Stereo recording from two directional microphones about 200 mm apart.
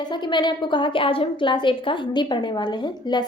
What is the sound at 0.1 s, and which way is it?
A woman's voice, 20° left (ahead or behind).